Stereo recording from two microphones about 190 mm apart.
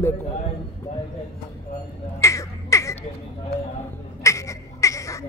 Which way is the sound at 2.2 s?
15° left (ahead or behind).